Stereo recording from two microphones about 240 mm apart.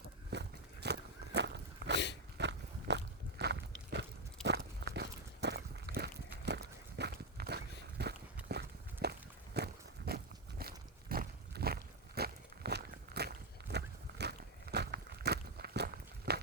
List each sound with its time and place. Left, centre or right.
0.3 s walk: right
2.4 s a sound: right
4.4 s walk: right
8.4 s horse: right
9.6 s walk: right
10.1 s a sound: right